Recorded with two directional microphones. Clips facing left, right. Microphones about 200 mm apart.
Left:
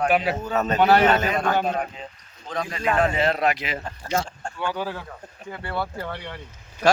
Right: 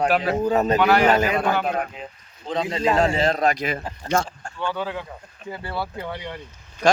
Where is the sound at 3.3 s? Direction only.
40° right (ahead or behind).